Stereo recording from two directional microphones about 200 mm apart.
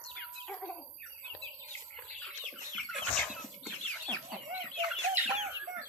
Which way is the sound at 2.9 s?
5° left (ahead or behind).